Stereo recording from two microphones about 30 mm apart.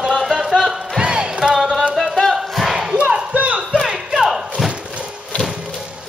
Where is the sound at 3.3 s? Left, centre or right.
Right.